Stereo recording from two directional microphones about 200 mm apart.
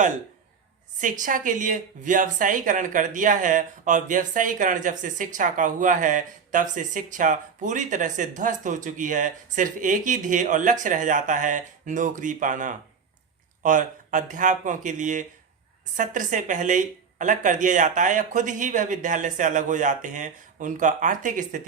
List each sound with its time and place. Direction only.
1.2 s speech: 40° right (ahead or behind)